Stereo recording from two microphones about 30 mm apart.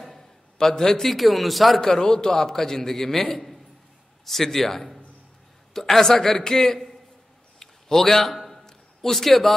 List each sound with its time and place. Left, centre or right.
0.6 s a man's voice: centre
1.0 s a man's voice: centre
1.8 s a man's voice: left
5.7 s a man's voice: centre
7.5 s a sound: centre